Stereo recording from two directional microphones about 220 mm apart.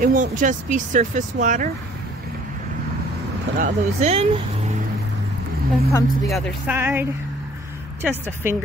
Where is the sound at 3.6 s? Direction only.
30° right (ahead or behind).